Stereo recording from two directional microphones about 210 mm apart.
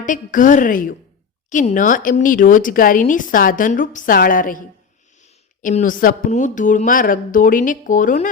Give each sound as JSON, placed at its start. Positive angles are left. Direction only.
{"t": 0.0, "sound": "speech", "side_deg": 40}